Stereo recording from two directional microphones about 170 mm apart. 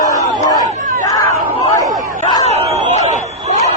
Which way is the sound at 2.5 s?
40° right (ahead or behind).